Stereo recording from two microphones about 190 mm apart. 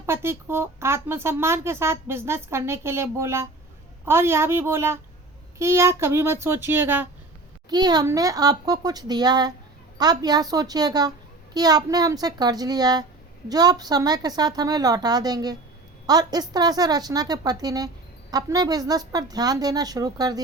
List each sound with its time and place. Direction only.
0.0 s a woman's voice: 15° right (ahead or behind)
7.7 s a woman's voice: 20° right (ahead or behind)